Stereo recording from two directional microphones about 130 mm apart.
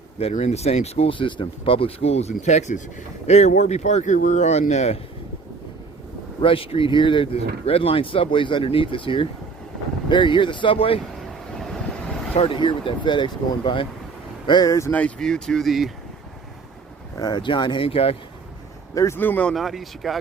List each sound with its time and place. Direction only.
0.2 s speech: 55° left (ahead or behind)
6.4 s speech: 45° left (ahead or behind)
11.3 s vehicle: 5° left (ahead or behind)
12.4 s speech: 40° left (ahead or behind); by 14.9 s 25° left (ahead or behind)
14.9 s speech: 5° left (ahead or behind)
17.2 s speech: 30° left (ahead or behind); by 18.2 s 50° left (ahead or behind)
18.9 s speech: 20° left (ahead or behind); by 20.1 s centre (ahead or behind)